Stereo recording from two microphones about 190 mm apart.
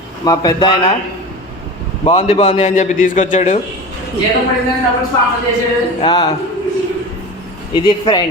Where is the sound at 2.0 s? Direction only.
30° left (ahead or behind).